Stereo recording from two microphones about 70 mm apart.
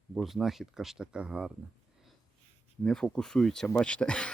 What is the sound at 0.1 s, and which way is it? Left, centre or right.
Speech, centre.